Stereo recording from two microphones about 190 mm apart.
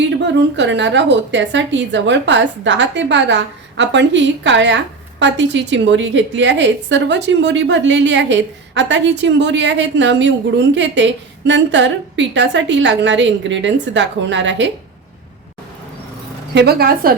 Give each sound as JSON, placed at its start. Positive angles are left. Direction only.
{"t": 0.2, "sound": "a woman's voice", "side_deg": -65}
{"t": 16.6, "sound": "a woman's voice", "side_deg": -55}